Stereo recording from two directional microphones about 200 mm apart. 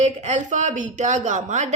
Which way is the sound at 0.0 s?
35° right (ahead or behind).